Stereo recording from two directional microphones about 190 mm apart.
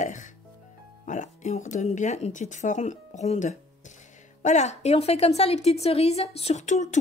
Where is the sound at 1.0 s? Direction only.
40° left (ahead or behind).